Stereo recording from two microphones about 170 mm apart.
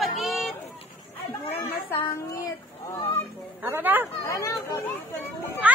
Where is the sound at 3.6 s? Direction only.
10° right (ahead or behind).